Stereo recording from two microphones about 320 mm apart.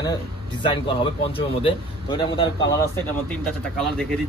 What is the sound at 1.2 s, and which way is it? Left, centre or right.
Speech, centre.